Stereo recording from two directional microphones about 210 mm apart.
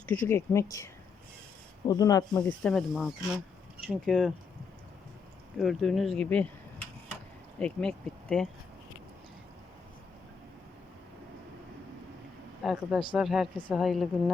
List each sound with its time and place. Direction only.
0.1 s speech: 10° left (ahead or behind)
1.9 s speech: 20° left (ahead or behind)
2.4 s speech: 5° left (ahead or behind)
5.5 s speech: centre (ahead or behind)
7.6 s speech: 5° left (ahead or behind)
12.6 s speech: centre (ahead or behind)